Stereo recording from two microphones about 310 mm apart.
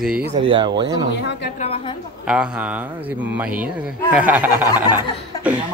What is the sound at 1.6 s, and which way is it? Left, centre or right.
Chuckle, centre.